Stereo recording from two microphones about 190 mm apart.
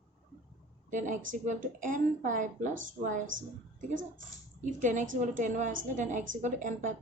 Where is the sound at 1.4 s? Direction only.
40° right (ahead or behind).